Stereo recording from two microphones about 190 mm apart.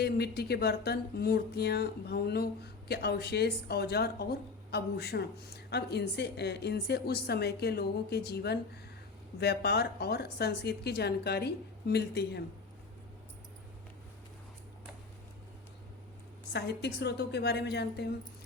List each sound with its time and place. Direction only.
0.0 s speech: 55° left (ahead or behind)
16.5 s speech: 60° left (ahead or behind)